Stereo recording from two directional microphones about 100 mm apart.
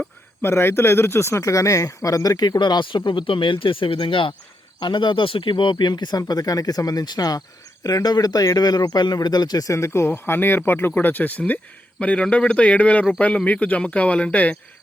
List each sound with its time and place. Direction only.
0.4 s speech: 25° left (ahead or behind)